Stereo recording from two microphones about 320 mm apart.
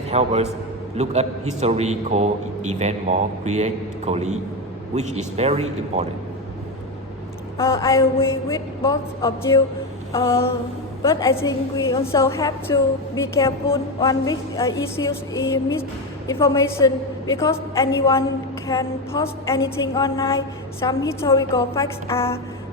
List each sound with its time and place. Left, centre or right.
0.1 s a man's voice: centre
7.6 s a woman's voice: centre